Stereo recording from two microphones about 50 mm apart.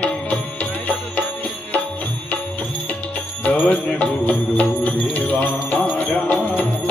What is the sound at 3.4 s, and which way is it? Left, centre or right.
Mantra, left.